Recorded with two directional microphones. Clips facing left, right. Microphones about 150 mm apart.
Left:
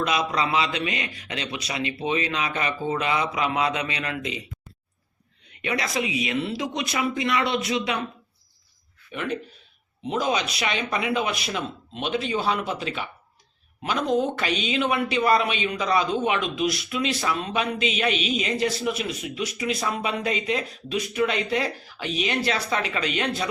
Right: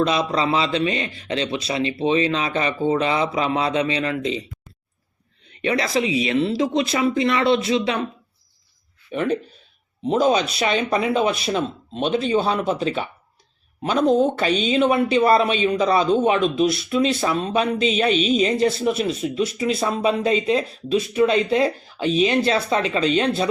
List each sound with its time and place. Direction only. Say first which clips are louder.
0.0 s a man's voice: right 4 dB; 30° right (ahead or behind)
5.5 s speech: right 6 dB; 30° right (ahead or behind)
9.1 s speech: right 7 dB; 35° right (ahead or behind)